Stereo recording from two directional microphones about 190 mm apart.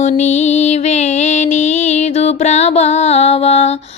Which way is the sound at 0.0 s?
35° left (ahead or behind).